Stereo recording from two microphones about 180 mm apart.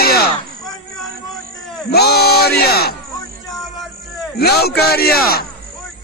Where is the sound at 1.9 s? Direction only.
60° left (ahead or behind).